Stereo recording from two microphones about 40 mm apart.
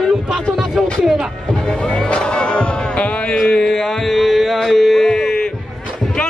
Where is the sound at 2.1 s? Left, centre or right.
Left.